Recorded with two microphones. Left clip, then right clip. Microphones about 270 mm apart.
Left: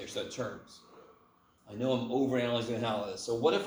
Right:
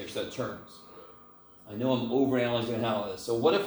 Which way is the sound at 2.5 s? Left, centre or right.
Left.